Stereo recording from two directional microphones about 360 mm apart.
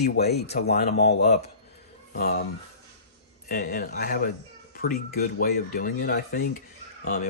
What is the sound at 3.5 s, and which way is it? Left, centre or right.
Speech, left.